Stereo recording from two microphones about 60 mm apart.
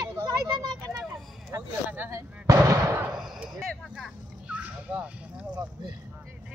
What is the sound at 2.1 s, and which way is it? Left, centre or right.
Fireworks, right.